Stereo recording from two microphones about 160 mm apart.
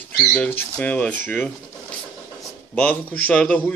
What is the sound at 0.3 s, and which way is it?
A man's voice, 10° left (ahead or behind).